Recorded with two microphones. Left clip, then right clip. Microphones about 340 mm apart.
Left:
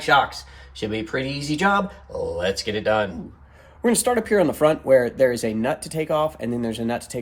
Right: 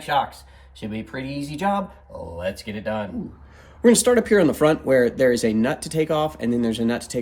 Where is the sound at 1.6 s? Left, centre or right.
Left.